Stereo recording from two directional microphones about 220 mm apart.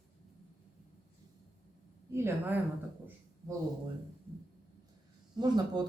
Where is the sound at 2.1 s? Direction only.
10° right (ahead or behind).